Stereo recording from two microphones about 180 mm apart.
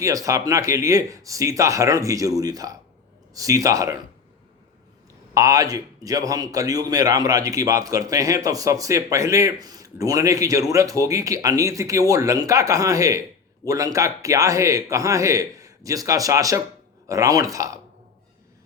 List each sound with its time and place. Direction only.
0.0 s a man's voice: 20° right (ahead or behind)
5.3 s a man's voice: 20° right (ahead or behind)